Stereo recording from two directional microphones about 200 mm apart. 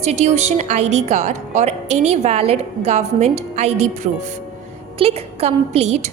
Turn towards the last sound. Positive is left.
turn(degrees=-30)  # may be behind; listen again after turning